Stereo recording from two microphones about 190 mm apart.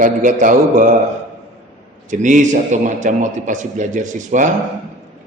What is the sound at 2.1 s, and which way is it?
A man's voice, 40° right (ahead or behind).